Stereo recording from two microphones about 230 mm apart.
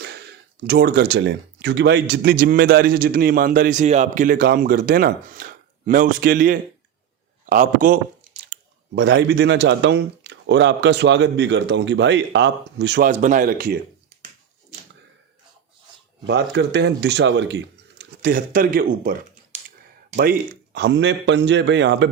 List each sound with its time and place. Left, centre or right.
0.0 s speech: right
7.4 s chewing: right
9.0 s a man's voice: right
13.1 s speech: right
16.2 s a man's voice: right
20.7 s a man's voice: right